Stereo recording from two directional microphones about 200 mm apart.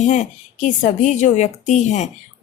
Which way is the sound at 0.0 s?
35° left (ahead or behind).